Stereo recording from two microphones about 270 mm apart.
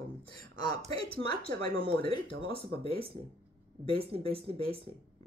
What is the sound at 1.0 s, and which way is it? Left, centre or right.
Speech, centre.